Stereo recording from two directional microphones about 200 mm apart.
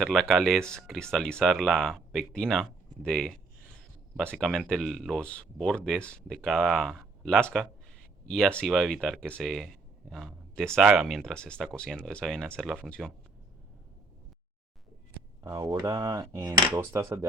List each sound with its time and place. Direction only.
0.0 s speech: centre (ahead or behind)
15.4 s speech: 15° right (ahead or behind)